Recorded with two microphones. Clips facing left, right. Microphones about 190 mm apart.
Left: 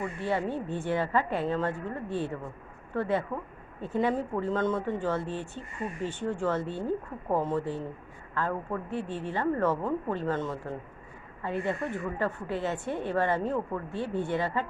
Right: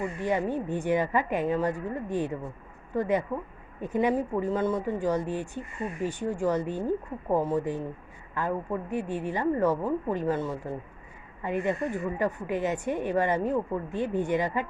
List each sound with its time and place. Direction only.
0.2 s speech: 15° right (ahead or behind)